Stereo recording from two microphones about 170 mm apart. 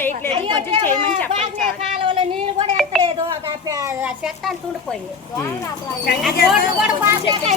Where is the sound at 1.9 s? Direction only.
30° right (ahead or behind).